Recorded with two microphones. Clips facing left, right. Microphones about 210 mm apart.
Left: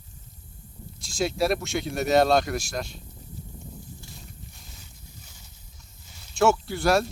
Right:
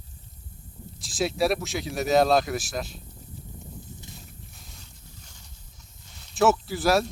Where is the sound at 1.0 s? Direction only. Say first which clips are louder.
Even; centre (ahead or behind).